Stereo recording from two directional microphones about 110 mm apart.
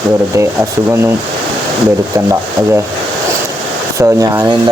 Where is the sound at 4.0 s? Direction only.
30° right (ahead or behind).